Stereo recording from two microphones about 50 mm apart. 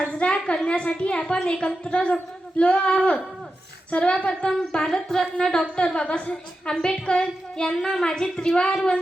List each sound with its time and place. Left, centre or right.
0.2 s a woman's voice: centre